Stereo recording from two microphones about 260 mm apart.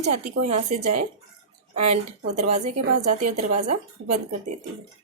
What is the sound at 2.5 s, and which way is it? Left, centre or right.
Speech, right.